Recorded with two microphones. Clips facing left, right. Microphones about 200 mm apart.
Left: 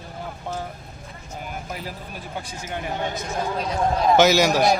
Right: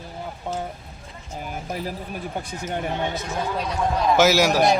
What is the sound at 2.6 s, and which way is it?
Speech, 45° right (ahead or behind).